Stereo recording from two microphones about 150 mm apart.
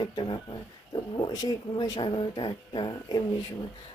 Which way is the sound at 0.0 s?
30° left (ahead or behind).